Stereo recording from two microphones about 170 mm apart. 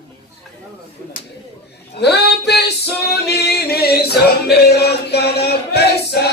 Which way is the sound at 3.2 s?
70° left (ahead or behind).